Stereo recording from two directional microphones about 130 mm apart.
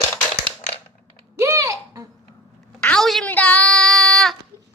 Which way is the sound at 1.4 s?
25° right (ahead or behind).